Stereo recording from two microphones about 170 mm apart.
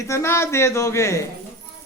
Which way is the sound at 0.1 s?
15° left (ahead or behind).